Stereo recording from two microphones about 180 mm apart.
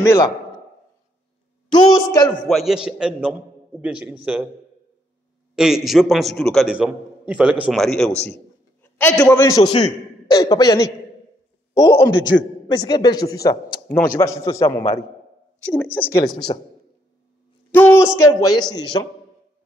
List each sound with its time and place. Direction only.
0.0 s a man's voice: 15° left (ahead or behind)
1.7 s a man's voice: 25° left (ahead or behind)
2.4 s a man's voice: centre (ahead or behind)
5.6 s a man's voice: 5° right (ahead or behind)
8.8 s a man's voice: 15° left (ahead or behind)
17.6 s a man's voice: 10° left (ahead or behind)